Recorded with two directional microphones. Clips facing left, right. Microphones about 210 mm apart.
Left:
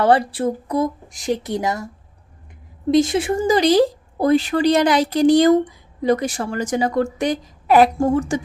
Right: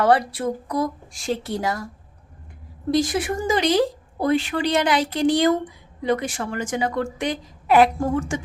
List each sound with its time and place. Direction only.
0.0 s speech: 30° left (ahead or behind)
2.9 s speech: 25° left (ahead or behind)